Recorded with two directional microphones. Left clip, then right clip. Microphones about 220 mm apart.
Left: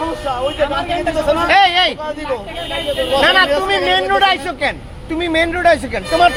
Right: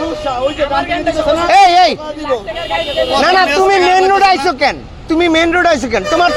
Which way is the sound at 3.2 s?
55° right (ahead or behind).